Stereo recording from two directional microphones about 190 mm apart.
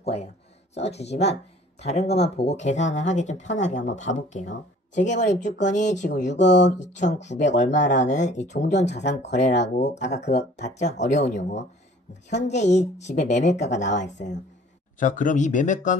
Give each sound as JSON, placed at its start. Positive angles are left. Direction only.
{"t": 0.0, "sound": "speech", "side_deg": 35}